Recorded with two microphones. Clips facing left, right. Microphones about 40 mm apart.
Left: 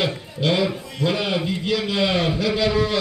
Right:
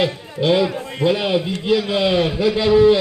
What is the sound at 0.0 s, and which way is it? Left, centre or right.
A man's voice, right.